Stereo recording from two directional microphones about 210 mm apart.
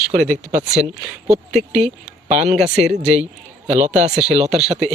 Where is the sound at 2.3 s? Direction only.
30° right (ahead or behind).